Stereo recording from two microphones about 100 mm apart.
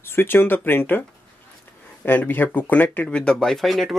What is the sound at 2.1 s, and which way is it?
Speech, 20° left (ahead or behind).